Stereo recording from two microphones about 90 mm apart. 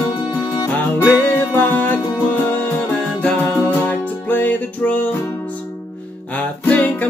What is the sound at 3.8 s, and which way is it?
Music, 20° left (ahead or behind).